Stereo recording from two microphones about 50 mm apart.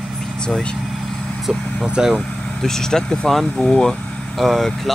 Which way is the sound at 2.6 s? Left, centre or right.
Centre.